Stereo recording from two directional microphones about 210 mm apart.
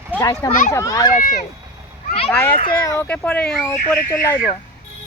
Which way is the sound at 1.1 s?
40° left (ahead or behind).